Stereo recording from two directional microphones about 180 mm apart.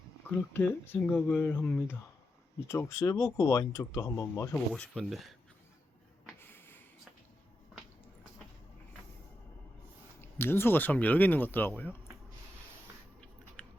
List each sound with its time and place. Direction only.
0.3 s speech: 10° left (ahead or behind)
4.5 s speech: 5° left (ahead or behind)
6.4 s snort: 10° left (ahead or behind)
10.2 s speech: 15° left (ahead or behind)
13.6 s biting: 5° left (ahead or behind)